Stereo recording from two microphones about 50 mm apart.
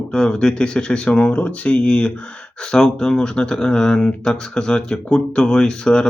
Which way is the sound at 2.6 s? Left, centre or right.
Centre.